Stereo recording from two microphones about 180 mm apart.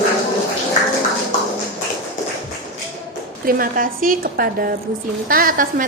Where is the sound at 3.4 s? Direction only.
55° right (ahead or behind).